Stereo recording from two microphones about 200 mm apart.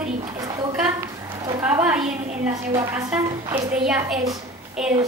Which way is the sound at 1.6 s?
5° right (ahead or behind).